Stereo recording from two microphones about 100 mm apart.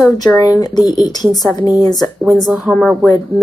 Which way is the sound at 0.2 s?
40° left (ahead or behind).